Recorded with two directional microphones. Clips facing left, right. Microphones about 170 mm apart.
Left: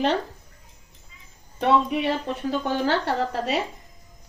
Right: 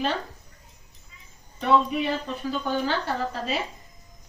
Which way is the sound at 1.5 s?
70° left (ahead or behind).